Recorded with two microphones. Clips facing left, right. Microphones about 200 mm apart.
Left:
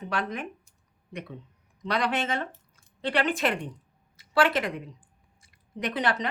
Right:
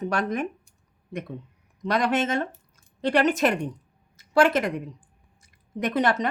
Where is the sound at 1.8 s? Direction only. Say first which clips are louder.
Right 4 dB; 45° right (ahead or behind).